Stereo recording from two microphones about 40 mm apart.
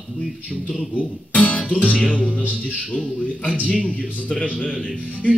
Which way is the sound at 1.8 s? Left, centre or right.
Left.